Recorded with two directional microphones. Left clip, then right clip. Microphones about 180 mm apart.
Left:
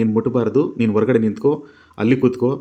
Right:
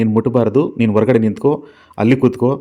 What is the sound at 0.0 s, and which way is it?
Speech, 25° right (ahead or behind).